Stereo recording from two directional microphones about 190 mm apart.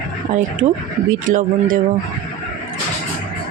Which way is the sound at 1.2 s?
45° right (ahead or behind).